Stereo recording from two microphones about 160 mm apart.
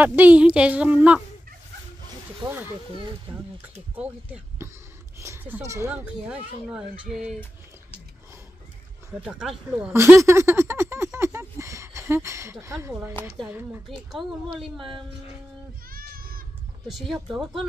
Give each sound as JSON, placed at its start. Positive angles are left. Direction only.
{"t": 0.0, "sound": "speech", "side_deg": -10}
{"t": 2.4, "sound": "speech", "side_deg": -15}
{"t": 3.3, "sound": "speech", "side_deg": -35}
{"t": 3.9, "sound": "speech", "side_deg": -10}
{"t": 9.2, "sound": "speech", "side_deg": -5}
{"t": 13.8, "sound": "speech", "side_deg": 0}
{"t": 15.9, "sound": "goat", "side_deg": -65}
{"t": 16.8, "sound": "speech", "side_deg": 0}